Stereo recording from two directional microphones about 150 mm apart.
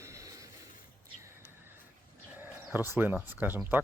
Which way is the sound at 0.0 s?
20° right (ahead or behind).